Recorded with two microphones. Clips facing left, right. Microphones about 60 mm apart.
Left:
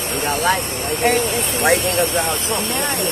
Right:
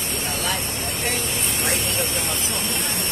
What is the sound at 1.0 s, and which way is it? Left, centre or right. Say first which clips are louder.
Speech: left 11 dB; left.